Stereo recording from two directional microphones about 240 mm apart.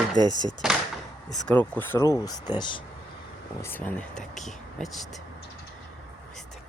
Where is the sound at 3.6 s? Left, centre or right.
Centre.